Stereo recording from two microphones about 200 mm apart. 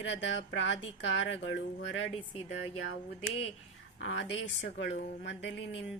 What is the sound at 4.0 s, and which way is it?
A woman's voice, 65° left (ahead or behind).